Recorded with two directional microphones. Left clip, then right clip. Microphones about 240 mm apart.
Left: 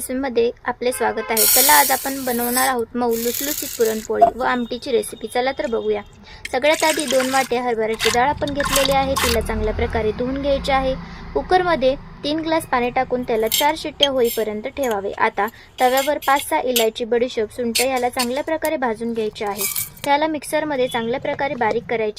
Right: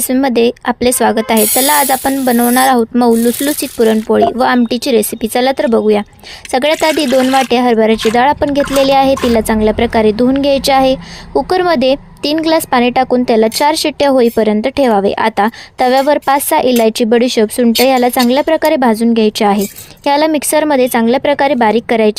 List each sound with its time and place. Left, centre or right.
0.1 s a woman's voice: right